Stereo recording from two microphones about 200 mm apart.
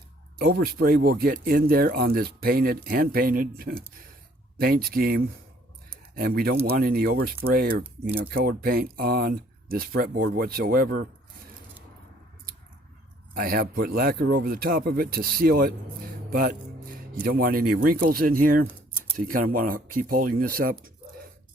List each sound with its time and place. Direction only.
0.3 s speech: 45° right (ahead or behind)
13.3 s speech: 45° right (ahead or behind)